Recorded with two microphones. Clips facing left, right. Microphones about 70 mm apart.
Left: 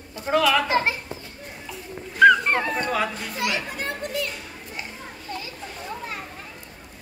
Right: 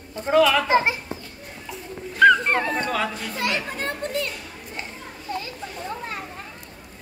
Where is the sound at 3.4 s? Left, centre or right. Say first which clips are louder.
Right 1 dB; right.